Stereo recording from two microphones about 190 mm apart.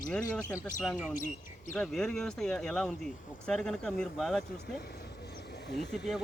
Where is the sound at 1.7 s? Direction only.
5° left (ahead or behind).